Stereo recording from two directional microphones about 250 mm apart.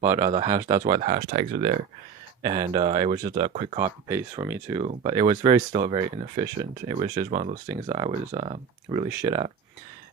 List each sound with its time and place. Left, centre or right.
0.0 s speech: centre
1.0 s speech: right
4.1 s speech: centre
4.8 s speech: right
5.3 s speech: centre
7.7 s speech: centre